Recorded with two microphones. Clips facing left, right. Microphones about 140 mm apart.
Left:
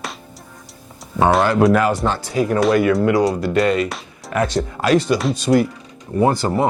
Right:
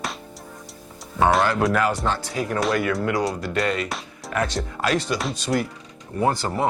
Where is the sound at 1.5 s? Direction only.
20° left (ahead or behind).